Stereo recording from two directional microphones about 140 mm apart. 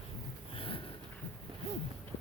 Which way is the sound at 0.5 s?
40° left (ahead or behind).